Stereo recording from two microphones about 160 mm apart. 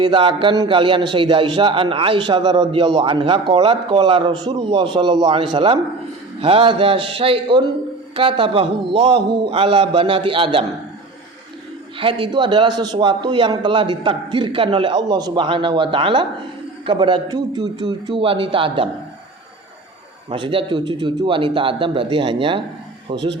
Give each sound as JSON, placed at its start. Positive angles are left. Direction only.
{"t": 0.0, "sound": "a man's voice", "side_deg": -30}
{"t": 11.9, "sound": "a man's voice", "side_deg": -35}
{"t": 20.3, "sound": "a man's voice", "side_deg": -35}